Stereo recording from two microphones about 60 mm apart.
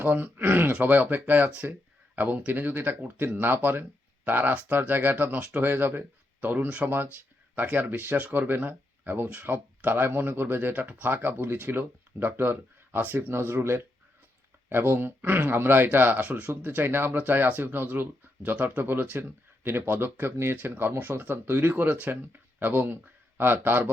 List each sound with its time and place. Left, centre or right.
0.0 s speech: right